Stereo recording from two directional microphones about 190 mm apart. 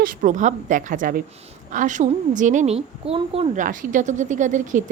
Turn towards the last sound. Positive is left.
turn(degrees=-40)  # may be behind; listen again after turning